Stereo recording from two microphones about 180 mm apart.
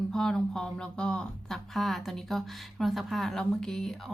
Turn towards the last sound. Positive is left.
turn(degrees=5)  # may be behind; listen again after turning